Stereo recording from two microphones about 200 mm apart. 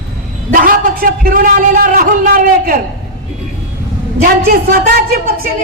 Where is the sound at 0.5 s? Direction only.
45° right (ahead or behind).